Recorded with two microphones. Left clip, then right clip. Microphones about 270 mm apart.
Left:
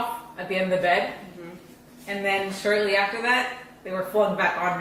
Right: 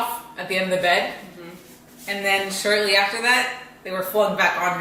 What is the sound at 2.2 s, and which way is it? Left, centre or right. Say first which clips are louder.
Speech: right 3 dB; centre.